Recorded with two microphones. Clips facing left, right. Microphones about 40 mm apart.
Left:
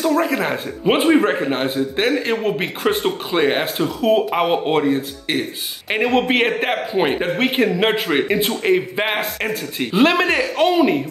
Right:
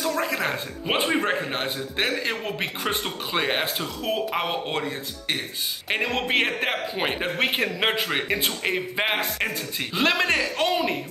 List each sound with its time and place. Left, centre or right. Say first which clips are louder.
0.0 s speech: left 7 dB; centre